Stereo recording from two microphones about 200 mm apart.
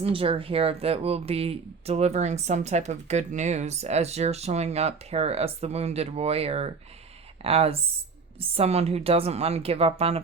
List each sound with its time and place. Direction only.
0.0 s speech: 30° right (ahead or behind)